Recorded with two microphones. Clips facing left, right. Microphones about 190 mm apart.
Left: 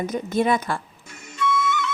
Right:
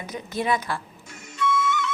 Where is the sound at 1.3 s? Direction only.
60° left (ahead or behind).